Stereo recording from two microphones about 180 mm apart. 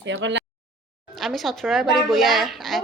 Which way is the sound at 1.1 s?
Centre (ahead or behind).